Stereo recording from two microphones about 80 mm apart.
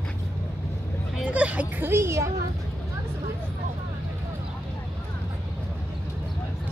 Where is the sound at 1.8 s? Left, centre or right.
Right.